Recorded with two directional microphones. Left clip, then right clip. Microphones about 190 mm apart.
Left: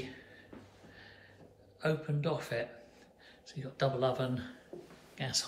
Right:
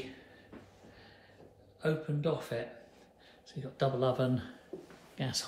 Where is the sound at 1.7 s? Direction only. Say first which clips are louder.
Even; 10° right (ahead or behind).